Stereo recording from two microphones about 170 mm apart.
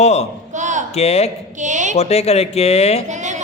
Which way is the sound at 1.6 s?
45° right (ahead or behind).